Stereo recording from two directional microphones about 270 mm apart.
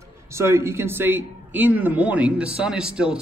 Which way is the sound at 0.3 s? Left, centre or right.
Centre.